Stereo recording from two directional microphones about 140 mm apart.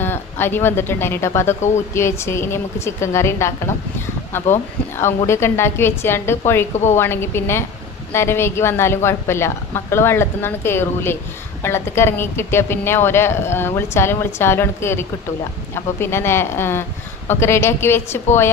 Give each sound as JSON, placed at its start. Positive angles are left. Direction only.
{"t": 0.0, "sound": "a woman's voice", "side_deg": 15}
{"t": 4.9, "sound": "a woman's voice", "side_deg": 20}